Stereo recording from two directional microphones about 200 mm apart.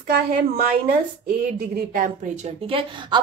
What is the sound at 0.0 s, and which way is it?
A woman's voice, 45° right (ahead or behind).